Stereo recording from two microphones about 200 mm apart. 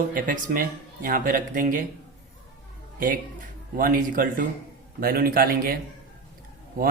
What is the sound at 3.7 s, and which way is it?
Speech, 45° right (ahead or behind).